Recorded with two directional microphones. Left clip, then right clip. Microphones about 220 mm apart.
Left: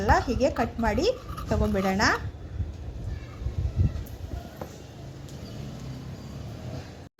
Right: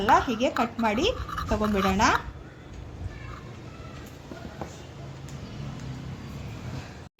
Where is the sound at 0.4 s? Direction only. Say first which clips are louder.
Even; centre (ahead or behind).